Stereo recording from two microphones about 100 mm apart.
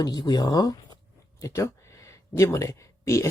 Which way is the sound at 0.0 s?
45° left (ahead or behind).